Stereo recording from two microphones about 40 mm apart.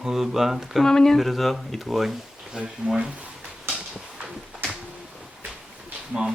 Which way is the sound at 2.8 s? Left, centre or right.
Centre.